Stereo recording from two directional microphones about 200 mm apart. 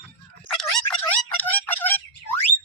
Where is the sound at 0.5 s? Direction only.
5° left (ahead or behind).